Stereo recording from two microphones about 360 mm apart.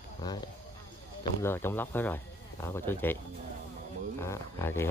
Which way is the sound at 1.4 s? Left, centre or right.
Centre.